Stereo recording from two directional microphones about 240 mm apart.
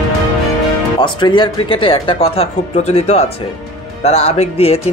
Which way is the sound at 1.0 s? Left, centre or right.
Centre.